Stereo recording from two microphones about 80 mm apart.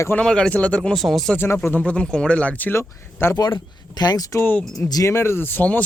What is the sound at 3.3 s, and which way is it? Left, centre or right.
Speech, left.